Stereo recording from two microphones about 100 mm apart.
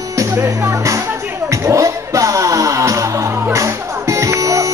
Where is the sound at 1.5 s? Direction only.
30° right (ahead or behind).